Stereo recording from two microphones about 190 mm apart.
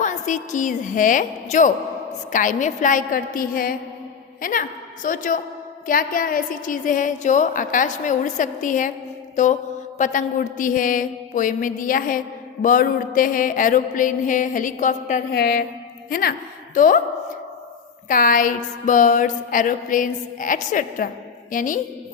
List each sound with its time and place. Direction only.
0.0 s a woman's voice: 40° left (ahead or behind)
9.3 s mantra: 40° left (ahead or behind)
10.0 s a woman's voice: 45° left (ahead or behind)
15.3 s a woman's voice: 55° left (ahead or behind)
18.1 s a woman's voice: 45° left (ahead or behind)